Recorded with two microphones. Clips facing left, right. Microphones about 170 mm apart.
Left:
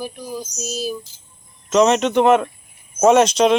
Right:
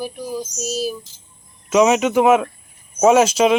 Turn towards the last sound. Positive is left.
turn(degrees=-5)  # may be behind; listen again after turning